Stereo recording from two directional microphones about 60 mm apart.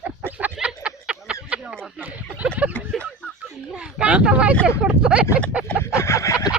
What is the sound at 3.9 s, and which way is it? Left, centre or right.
Speech, centre.